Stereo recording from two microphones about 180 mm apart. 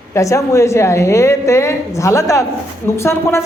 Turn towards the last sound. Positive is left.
turn(degrees=15)  # may be behind; listen again after turning